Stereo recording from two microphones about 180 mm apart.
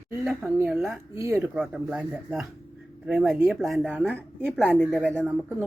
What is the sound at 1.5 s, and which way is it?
Speech, 5° right (ahead or behind).